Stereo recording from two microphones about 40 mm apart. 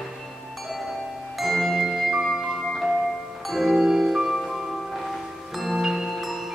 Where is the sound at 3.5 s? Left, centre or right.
Centre.